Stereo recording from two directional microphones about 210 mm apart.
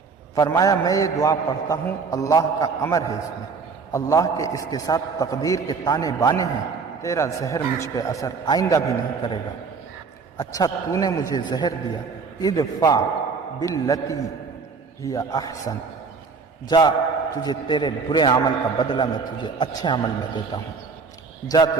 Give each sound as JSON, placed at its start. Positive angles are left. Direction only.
{"t": 0.3, "sound": "a man's voice", "side_deg": 15}
{"t": 10.3, "sound": "a man's voice", "side_deg": 15}